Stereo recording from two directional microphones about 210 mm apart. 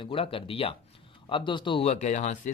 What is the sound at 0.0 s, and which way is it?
Speech, 25° left (ahead or behind).